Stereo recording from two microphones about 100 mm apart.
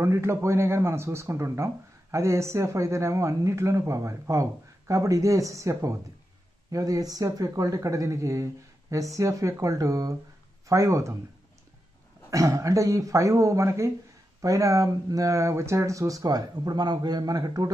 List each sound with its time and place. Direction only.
0.0 s a man's voice: 25° right (ahead or behind)
12.3 s speech: 30° right (ahead or behind)